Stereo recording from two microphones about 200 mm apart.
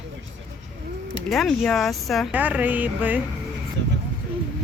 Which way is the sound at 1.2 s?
Centre (ahead or behind).